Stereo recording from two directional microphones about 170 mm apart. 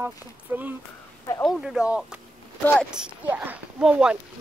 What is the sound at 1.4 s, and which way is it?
Speech, centre (ahead or behind).